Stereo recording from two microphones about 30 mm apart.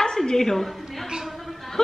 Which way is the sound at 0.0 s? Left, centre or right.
Left.